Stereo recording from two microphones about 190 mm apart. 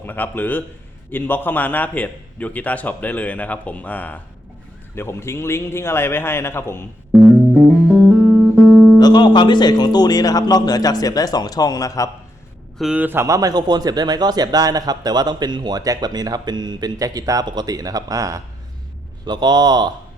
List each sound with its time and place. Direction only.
0.0 s a man's voice: 10° left (ahead or behind)
7.1 s music: 10° right (ahead or behind)
9.0 s speech: 20° left (ahead or behind)
12.8 s a man's voice: 5° right (ahead or behind); by 19.9 s 20° right (ahead or behind)